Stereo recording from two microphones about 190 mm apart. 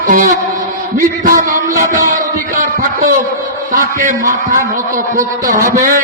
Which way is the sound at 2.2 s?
45° right (ahead or behind).